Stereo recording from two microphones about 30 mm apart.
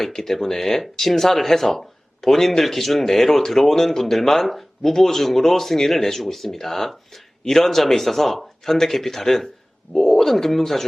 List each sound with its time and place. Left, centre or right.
0.0 s speech: centre